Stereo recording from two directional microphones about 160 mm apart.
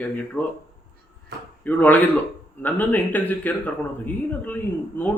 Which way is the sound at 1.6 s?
10° left (ahead or behind).